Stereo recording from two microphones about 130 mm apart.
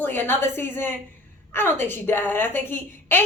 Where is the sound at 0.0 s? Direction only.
15° left (ahead or behind).